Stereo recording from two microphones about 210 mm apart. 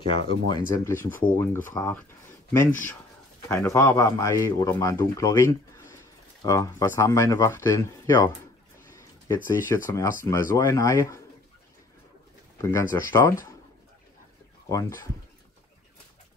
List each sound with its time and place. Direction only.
0.5 s speech: 20° left (ahead or behind)
0.9 s a man's voice: 10° left (ahead or behind)
8.9 s a sound: 15° left (ahead or behind)
9.8 s a man's voice: 15° left (ahead or behind)
12.6 s a man's voice: 10° left (ahead or behind)
14.7 s a man's voice: 15° left (ahead or behind)